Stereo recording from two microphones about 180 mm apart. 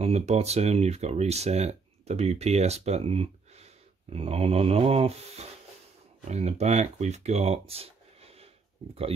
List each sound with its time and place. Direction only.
0.0 s speech: 35° right (ahead or behind)